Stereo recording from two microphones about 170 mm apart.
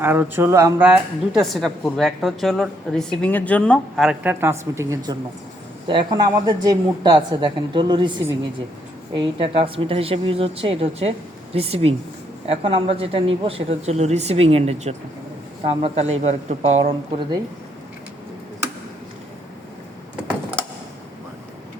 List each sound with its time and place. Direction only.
0.0 s a woman's voice: 15° right (ahead or behind)
9.1 s speech: 30° right (ahead or behind)